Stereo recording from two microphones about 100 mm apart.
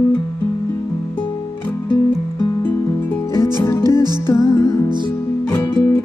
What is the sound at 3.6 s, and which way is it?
Music, 30° left (ahead or behind).